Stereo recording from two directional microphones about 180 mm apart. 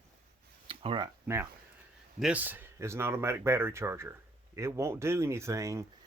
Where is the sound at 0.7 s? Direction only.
30° right (ahead or behind).